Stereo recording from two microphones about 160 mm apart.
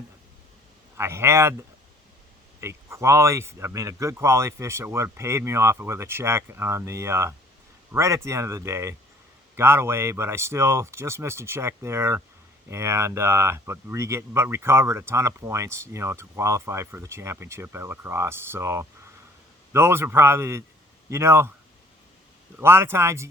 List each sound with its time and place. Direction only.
0.9 s speech: 15° right (ahead or behind)
2.6 s speech: 15° right (ahead or behind)
22.6 s speech: 15° right (ahead or behind)